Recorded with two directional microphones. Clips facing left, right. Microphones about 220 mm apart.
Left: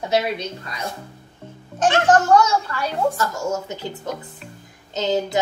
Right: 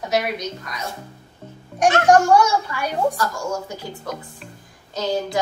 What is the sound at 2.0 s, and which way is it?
Speech, 10° right (ahead or behind).